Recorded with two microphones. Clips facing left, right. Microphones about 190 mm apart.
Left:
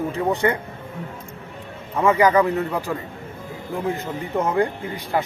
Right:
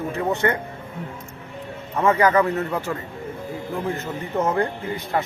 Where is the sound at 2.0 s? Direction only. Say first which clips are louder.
Left 1 dB; 10° left (ahead or behind).